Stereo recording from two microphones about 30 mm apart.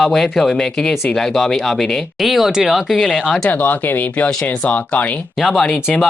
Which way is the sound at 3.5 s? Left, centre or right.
Left.